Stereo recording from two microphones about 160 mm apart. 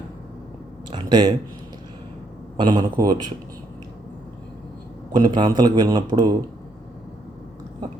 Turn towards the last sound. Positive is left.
turn(degrees=-25)  # may be behind; listen again after turning